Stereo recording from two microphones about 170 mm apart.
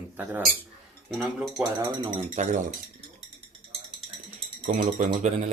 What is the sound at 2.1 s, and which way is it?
Speech, 45° right (ahead or behind).